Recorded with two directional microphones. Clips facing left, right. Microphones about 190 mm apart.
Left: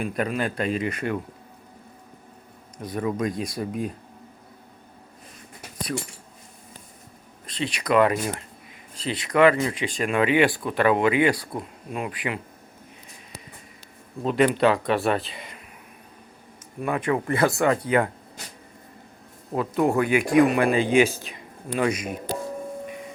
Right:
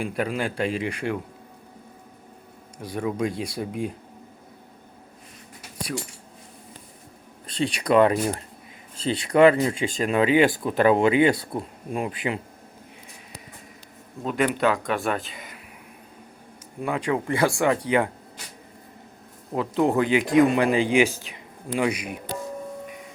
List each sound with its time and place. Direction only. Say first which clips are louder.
0.0 s speech: left 1 dB; 10° right (ahead or behind)
2.7 s speech: left 1 dB; 10° right (ahead or behind)
7.5 s speech: right 2 dB; 30° right (ahead or behind)
14.3 s speech: left 3 dB; centre (ahead or behind)
16.8 s speech: left 1 dB; 15° right (ahead or behind)
19.5 s speech: even; 20° right (ahead or behind)